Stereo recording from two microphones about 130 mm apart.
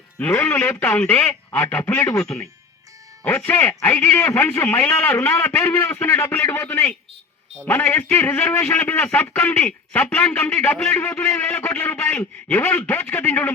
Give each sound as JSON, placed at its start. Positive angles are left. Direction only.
{"t": 0.2, "sound": "a man's voice", "side_deg": 15}
{"t": 3.2, "sound": "a man's voice", "side_deg": 15}